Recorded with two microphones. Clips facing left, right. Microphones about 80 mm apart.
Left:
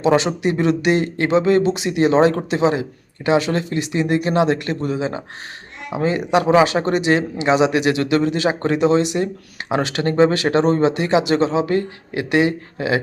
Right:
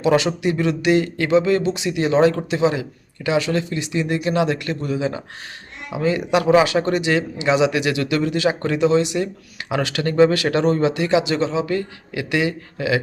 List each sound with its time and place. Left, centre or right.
0.0 s speech: left